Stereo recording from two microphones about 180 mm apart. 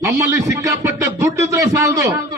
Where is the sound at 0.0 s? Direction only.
15° right (ahead or behind).